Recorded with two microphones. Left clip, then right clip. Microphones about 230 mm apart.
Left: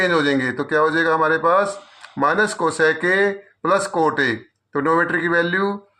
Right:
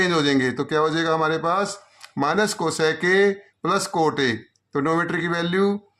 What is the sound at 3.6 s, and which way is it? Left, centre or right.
Speech, right.